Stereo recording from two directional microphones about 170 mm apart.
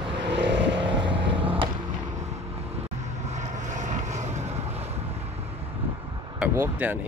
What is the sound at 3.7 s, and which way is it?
Vehicle, 45° right (ahead or behind).